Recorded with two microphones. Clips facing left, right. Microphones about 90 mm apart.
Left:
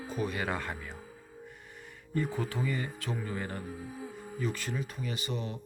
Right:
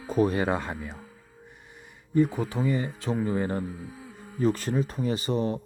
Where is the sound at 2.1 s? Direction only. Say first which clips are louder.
Right 8 dB; 20° right (ahead or behind).